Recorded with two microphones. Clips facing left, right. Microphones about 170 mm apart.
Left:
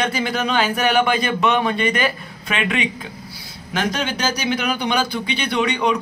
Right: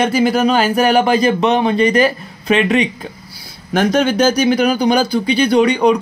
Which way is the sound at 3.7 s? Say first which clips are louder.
Right 9 dB; 45° right (ahead or behind).